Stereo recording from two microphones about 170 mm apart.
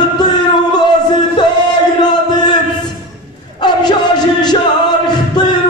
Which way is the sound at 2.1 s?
25° left (ahead or behind).